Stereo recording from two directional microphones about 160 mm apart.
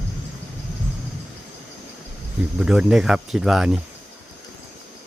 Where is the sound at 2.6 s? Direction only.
5° right (ahead or behind).